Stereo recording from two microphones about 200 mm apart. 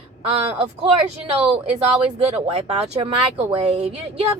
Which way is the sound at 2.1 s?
30° right (ahead or behind).